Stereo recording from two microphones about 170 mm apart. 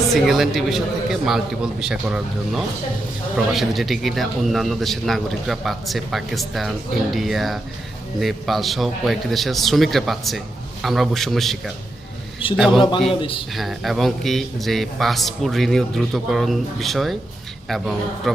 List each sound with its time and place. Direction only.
0.1 s a man's voice: centre (ahead or behind)